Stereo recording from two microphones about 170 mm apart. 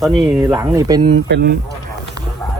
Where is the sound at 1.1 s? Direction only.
80° right.